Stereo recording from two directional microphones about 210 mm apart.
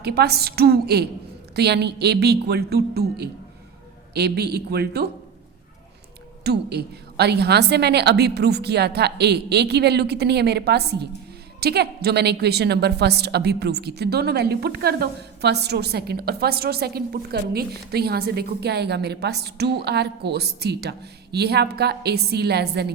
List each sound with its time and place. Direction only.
0.0 s a woman's voice: 50° right (ahead or behind)
6.4 s a woman's voice: 50° right (ahead or behind)